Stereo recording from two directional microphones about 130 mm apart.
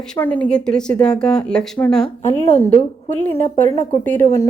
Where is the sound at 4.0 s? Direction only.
15° left (ahead or behind).